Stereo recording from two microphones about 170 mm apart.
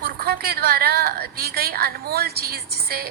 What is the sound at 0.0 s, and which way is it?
A woman's voice, 65° right (ahead or behind).